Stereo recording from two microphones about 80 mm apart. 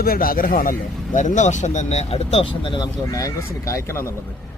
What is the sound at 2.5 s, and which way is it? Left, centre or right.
Speech, left.